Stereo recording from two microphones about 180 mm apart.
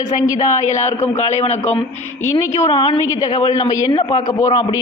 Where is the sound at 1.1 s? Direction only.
40° left (ahead or behind).